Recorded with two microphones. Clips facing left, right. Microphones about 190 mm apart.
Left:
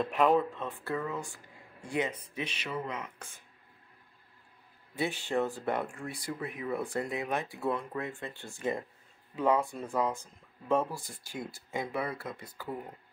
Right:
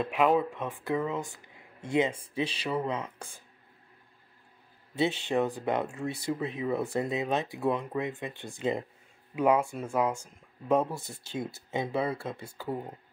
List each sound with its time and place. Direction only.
0.0 s speech: 5° right (ahead or behind); by 3.3 s 30° right (ahead or behind)
4.9 s speech: 20° right (ahead or behind)